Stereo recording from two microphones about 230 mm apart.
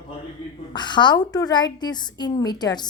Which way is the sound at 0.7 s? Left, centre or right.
Centre.